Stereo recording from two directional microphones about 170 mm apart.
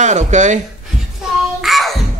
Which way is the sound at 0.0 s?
45° right (ahead or behind).